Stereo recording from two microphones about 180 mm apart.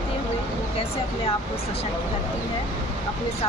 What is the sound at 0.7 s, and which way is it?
Speech, 30° left (ahead or behind).